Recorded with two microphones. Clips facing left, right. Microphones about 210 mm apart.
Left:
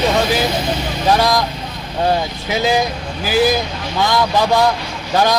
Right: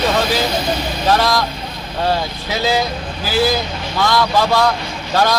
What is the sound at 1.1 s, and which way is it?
A man's voice, 15° left (ahead or behind).